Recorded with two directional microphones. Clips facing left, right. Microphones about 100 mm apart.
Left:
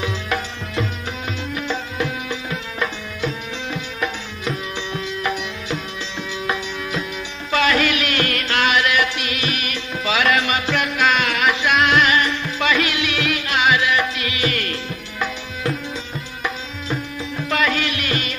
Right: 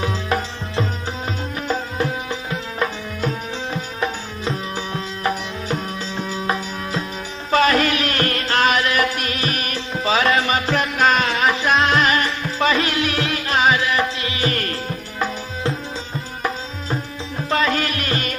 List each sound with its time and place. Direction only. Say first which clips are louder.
0.0 s music: right 2 dB; 35° right (ahead or behind)